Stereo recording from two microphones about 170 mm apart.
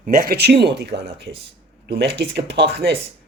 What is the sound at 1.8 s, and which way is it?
Speech, 75° right (ahead or behind).